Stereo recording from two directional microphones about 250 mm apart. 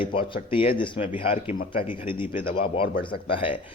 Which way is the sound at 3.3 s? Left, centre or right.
Left.